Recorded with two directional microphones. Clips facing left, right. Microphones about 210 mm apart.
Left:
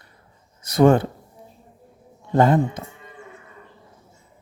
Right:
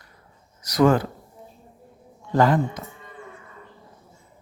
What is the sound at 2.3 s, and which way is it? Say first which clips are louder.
Speech: left 2 dB; 25° left (ahead or behind).